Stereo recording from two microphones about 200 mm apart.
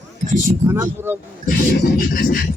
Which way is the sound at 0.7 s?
15° right (ahead or behind).